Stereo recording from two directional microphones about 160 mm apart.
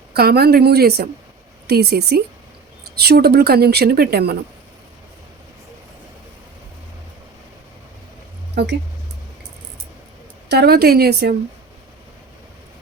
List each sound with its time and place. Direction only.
0.1 s speech: 75° right (ahead or behind)
8.6 s speech: 90° right
10.5 s speech: 85° right